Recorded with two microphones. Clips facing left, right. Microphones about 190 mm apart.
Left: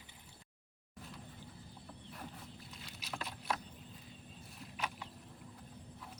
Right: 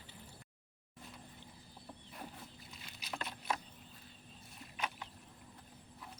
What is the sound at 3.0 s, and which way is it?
Vehicle, centre (ahead or behind).